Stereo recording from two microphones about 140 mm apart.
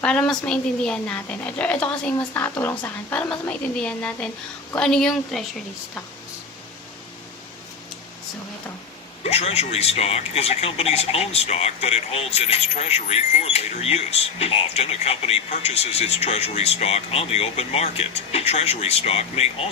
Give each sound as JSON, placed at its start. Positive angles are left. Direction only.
{"t": 0.0, "sound": "a woman's voice", "side_deg": 5}
{"t": 9.2, "sound": "a man's voice", "side_deg": 50}